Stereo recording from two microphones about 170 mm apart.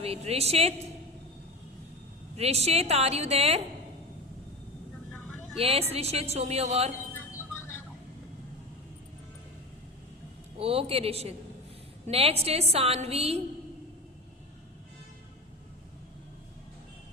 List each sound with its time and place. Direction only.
0.0 s a woman's voice: 35° right (ahead or behind)
2.3 s a woman's voice: 40° right (ahead or behind)
5.5 s a woman's voice: 35° right (ahead or behind)
10.6 s a woman's voice: 35° right (ahead or behind)